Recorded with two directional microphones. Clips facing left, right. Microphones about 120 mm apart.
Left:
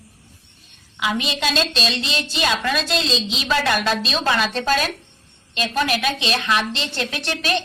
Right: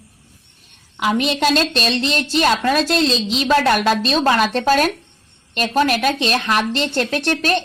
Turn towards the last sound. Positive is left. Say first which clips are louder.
# right 5 dB
turn(degrees=-45)  # may be behind; listen again after turning